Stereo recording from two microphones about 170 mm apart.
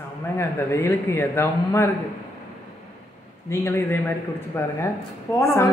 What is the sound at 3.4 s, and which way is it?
Speech, 15° left (ahead or behind).